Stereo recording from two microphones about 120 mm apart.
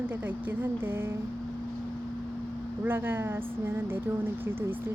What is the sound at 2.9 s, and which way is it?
Speech, 15° right (ahead or behind).